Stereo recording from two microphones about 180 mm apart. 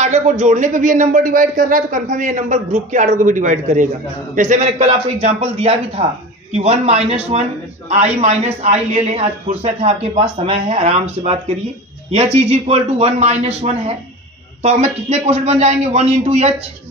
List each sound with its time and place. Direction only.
0.0 s a man's voice: 40° right (ahead or behind)